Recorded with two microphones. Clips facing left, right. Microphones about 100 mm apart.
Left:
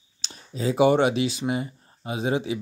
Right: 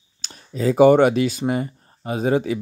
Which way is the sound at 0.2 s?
50° right (ahead or behind).